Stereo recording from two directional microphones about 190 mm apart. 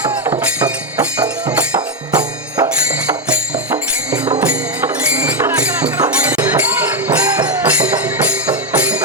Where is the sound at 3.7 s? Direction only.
5° right (ahead or behind).